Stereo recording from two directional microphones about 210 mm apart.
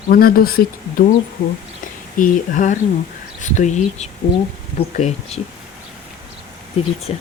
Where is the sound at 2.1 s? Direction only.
40° left (ahead or behind).